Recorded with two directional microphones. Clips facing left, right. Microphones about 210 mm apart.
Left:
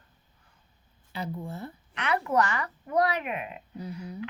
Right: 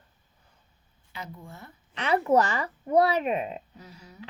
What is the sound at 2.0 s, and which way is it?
Speech, 30° right (ahead or behind).